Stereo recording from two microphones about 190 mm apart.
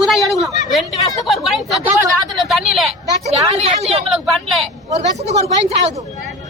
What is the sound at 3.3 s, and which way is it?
A woman's voice, 35° right (ahead or behind).